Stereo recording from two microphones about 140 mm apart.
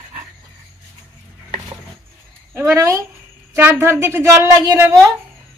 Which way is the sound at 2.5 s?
20° right (ahead or behind).